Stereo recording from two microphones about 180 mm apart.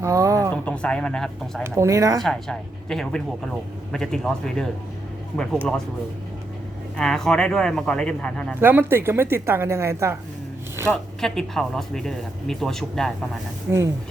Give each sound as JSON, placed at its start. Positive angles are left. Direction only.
{"t": 0.0, "sound": "a sound", "side_deg": -15}
{"t": 0.5, "sound": "speech", "side_deg": 5}
{"t": 1.6, "sound": "a woman's voice", "side_deg": -15}
{"t": 2.2, "sound": "speech", "side_deg": 5}
{"t": 6.9, "sound": "speech", "side_deg": 5}
{"t": 8.6, "sound": "a woman's voice", "side_deg": -10}
{"t": 10.8, "sound": "speech", "side_deg": 0}
{"t": 13.7, "sound": "a woman's voice", "side_deg": -15}